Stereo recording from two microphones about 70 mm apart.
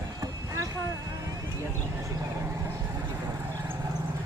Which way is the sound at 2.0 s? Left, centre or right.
Right.